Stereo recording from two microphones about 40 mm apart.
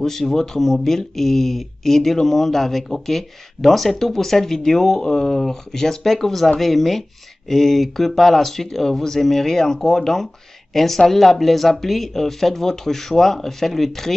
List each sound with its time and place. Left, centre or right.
0.0 s speech: centre